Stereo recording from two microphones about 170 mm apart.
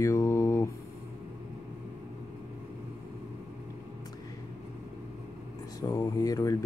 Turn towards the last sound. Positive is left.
turn(degrees=20)  # may be behind; listen again after turning